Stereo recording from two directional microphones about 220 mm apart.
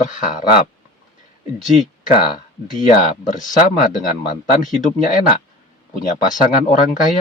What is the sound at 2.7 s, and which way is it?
Speech, 35° left (ahead or behind).